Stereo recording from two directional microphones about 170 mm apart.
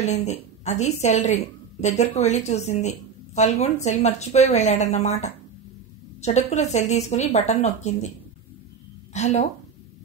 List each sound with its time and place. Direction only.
0.0 s a woman's voice: 40° left (ahead or behind)
9.1 s a woman's voice: 40° left (ahead or behind)